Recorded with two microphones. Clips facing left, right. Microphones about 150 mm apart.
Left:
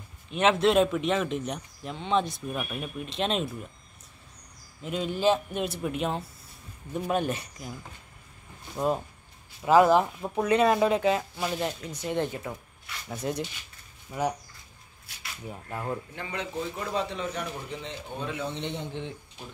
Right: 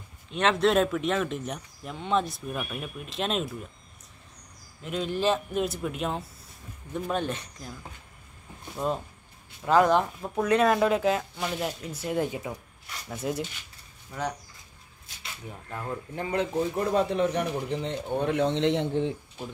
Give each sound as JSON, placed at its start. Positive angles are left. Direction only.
{"t": 0.3, "sound": "speech", "side_deg": 5}
{"t": 4.8, "sound": "speech", "side_deg": 0}
{"t": 8.7, "sound": "speech", "side_deg": 5}
{"t": 14.1, "sound": "speech", "side_deg": 5}
{"t": 15.5, "sound": "speech", "side_deg": 10}
{"t": 16.2, "sound": "a man's voice", "side_deg": -45}
{"t": 18.9, "sound": "speech", "side_deg": -30}